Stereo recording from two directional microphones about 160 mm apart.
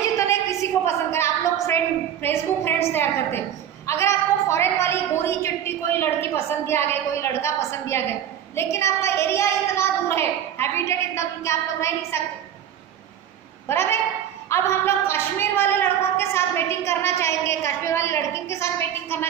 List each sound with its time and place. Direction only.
0.3 s a sound: 20° left (ahead or behind)
2.2 s a woman's voice: 15° left (ahead or behind)
13.7 s a woman's voice: 15° left (ahead or behind)